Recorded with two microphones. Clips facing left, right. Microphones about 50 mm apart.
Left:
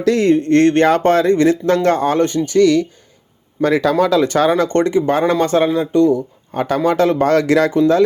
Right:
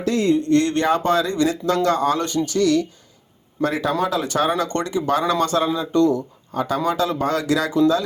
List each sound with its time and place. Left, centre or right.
0.0 s speech: left
0.3 s speech: left
3.6 s speech: left
5.9 s speech: centre
6.5 s speech: left